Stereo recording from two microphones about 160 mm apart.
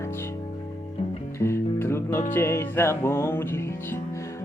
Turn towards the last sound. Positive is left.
turn(degrees=15)  # may be behind; listen again after turning